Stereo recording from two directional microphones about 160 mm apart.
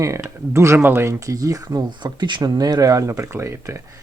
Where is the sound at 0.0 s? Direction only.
20° right (ahead or behind).